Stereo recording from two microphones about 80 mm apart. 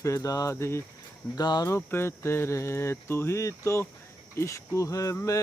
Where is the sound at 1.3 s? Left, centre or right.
Left.